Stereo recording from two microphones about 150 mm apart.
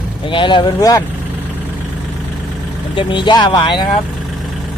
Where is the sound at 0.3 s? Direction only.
35° left (ahead or behind).